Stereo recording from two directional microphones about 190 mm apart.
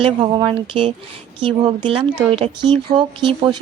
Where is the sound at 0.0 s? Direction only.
25° right (ahead or behind).